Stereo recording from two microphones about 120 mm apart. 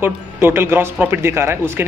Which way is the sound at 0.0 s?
20° right (ahead or behind).